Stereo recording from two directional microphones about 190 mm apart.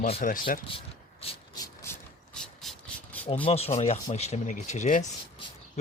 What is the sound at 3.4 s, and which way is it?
Speech, 30° left (ahead or behind).